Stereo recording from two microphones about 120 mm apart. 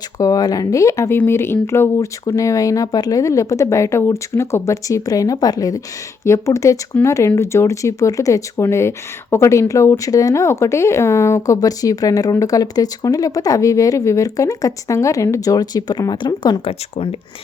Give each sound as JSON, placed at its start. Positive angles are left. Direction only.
{"t": 0.2, "sound": "speech", "side_deg": 30}
{"t": 16.6, "sound": "speech", "side_deg": 55}